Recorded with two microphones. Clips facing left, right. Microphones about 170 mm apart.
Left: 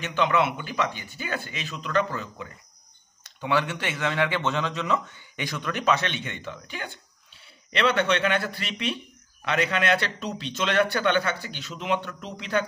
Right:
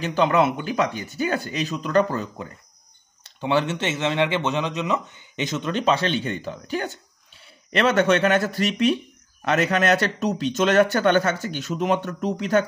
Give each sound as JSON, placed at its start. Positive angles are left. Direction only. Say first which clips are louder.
{"t": 0.0, "sound": "speech", "louder": "right 4 dB", "side_deg": -35}
{"t": 3.3, "sound": "speech", "louder": "right 4 dB", "side_deg": -25}